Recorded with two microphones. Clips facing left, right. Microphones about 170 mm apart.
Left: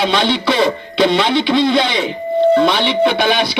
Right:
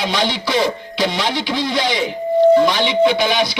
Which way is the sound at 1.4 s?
60° left (ahead or behind).